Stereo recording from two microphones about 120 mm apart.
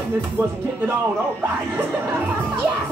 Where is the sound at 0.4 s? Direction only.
15° right (ahead or behind).